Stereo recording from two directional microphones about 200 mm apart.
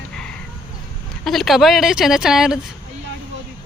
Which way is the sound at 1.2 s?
Centre (ahead or behind).